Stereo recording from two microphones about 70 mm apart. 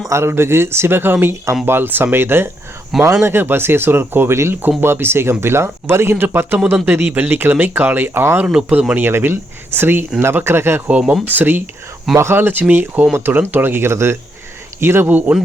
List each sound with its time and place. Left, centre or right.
0.1 s speech: right
2.9 s speech: centre
3.2 s speech: right
8.7 s speech: centre
9.0 s speech: right
10.8 s speech: right
12.1 s speech: right